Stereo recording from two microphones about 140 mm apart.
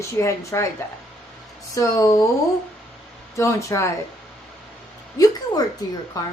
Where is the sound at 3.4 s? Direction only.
20° left (ahead or behind).